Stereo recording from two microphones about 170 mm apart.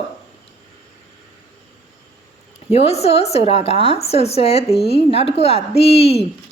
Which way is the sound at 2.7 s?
40° left (ahead or behind).